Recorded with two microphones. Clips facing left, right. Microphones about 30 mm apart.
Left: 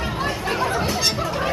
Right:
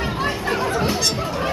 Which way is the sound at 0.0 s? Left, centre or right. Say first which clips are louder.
Right 2 dB; centre.